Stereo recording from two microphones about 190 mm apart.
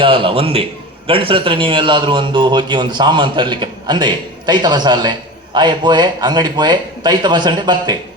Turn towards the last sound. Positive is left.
turn(degrees=-25)  # may be behind; listen again after turning